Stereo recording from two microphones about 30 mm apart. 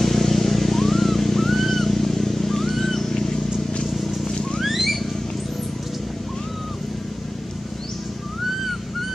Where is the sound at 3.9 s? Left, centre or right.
Centre.